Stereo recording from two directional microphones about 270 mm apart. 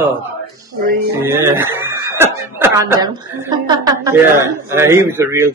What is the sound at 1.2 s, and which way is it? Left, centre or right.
A man's voice, centre.